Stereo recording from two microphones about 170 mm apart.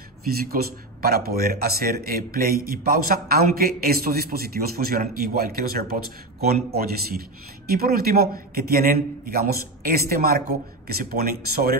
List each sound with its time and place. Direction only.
0.5 s a man's voice: 60° right (ahead or behind)